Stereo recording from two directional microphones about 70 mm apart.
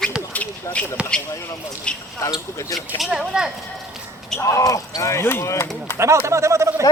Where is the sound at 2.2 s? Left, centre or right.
Left.